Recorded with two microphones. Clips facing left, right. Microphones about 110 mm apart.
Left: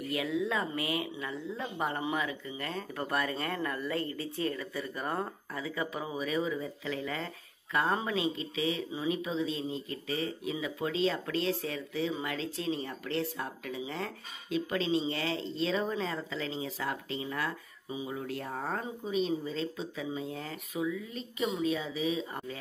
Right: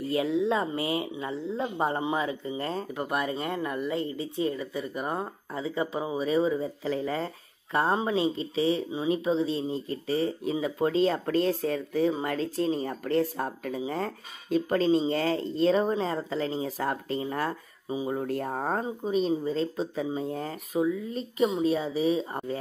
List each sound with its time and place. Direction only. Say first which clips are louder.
0.0 s speech: right 6 dB; 30° right (ahead or behind)
2.9 s speech: even; 15° right (ahead or behind)
5.5 s speech: right 5 dB; 25° right (ahead or behind)